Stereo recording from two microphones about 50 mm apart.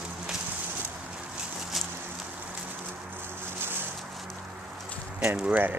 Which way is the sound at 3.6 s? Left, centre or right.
Right.